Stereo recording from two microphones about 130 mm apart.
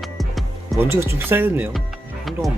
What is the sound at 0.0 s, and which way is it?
Music, centre (ahead or behind).